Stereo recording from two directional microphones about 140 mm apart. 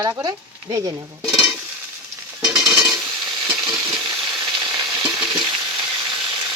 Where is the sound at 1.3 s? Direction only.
Centre (ahead or behind).